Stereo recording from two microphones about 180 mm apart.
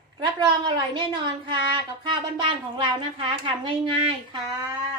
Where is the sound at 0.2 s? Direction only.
25° right (ahead or behind).